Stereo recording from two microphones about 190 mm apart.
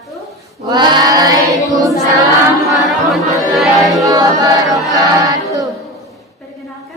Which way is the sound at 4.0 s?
20° right (ahead or behind).